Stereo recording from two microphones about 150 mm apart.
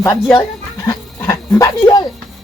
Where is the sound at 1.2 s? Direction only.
20° left (ahead or behind).